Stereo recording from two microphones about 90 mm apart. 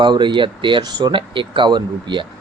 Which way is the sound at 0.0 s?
55° right (ahead or behind).